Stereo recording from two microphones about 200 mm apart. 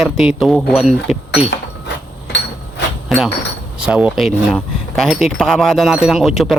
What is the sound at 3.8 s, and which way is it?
Speech, 5° right (ahead or behind).